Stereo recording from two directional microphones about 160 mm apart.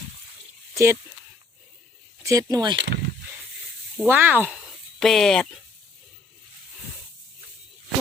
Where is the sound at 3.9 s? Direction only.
10° right (ahead or behind).